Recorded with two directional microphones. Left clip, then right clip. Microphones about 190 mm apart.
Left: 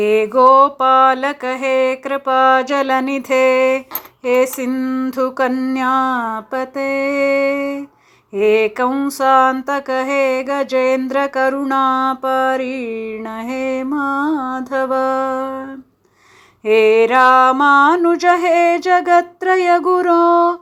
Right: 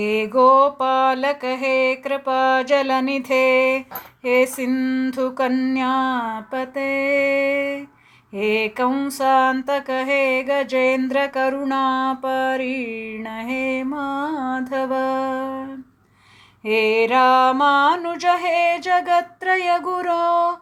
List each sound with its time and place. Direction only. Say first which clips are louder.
0.0 s music: left 5 dB; 25° left (ahead or behind)
16.6 s music: left 6 dB; 25° left (ahead or behind)